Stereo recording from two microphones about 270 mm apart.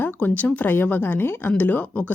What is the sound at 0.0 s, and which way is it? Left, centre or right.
Speech, centre.